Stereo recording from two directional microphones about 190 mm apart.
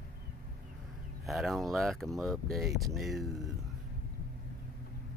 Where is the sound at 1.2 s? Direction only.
Centre (ahead or behind).